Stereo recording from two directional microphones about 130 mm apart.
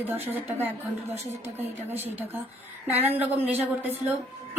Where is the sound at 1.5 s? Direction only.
15° right (ahead or behind).